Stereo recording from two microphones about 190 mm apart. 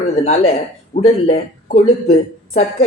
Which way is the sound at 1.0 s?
35° left (ahead or behind).